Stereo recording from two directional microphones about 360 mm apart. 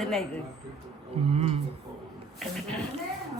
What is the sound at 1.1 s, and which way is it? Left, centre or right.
Speech, centre.